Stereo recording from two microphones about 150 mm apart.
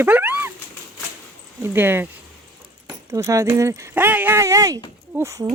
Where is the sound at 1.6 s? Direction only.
15° right (ahead or behind).